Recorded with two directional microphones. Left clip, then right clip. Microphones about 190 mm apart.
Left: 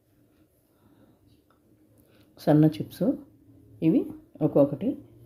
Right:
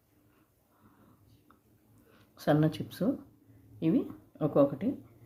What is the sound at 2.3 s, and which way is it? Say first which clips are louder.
Speech: left 6 dB; 25° left (ahead or behind).